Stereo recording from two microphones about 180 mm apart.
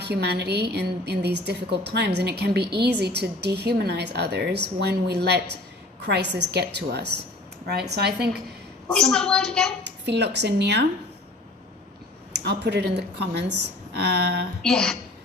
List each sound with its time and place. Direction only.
0.0 s a woman's voice: 65° right (ahead or behind)
8.9 s a woman's voice: 5° left (ahead or behind)
10.1 s a woman's voice: 65° right (ahead or behind)
12.3 s a woman's voice: 70° right (ahead or behind)
14.6 s a woman's voice: 5° left (ahead or behind)